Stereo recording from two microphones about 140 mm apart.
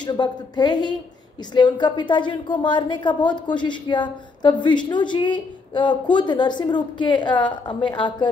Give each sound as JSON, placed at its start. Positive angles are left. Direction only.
{"t": 0.0, "sound": "a woman's voice", "side_deg": 30}